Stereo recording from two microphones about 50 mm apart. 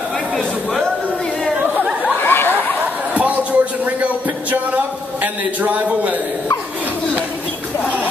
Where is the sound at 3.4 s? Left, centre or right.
Right.